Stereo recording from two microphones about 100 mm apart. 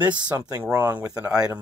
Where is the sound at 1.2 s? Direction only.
10° right (ahead or behind).